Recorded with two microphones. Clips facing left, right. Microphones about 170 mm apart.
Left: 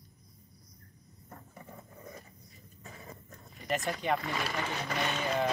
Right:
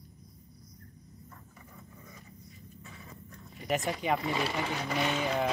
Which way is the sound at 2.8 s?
40° left (ahead or behind).